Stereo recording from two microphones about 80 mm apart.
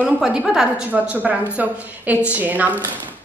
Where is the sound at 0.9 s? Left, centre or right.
Centre.